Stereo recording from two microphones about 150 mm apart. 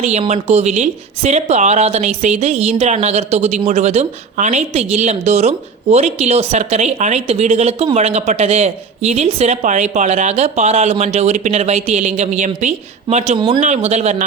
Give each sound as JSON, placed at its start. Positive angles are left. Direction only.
{"t": 0.0, "sound": "speech", "side_deg": -50}